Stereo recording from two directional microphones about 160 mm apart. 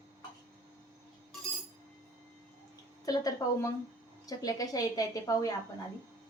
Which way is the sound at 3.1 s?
25° left (ahead or behind).